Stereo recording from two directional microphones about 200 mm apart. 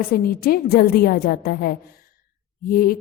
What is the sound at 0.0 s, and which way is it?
A woman's voice, 50° left (ahead or behind).